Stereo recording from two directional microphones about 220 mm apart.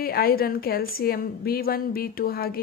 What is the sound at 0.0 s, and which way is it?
A woman's voice, 45° left (ahead or behind).